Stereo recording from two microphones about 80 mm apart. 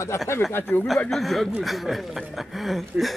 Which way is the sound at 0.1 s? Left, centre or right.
Left.